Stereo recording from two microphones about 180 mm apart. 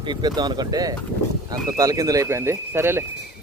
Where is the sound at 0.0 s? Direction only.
25° right (ahead or behind).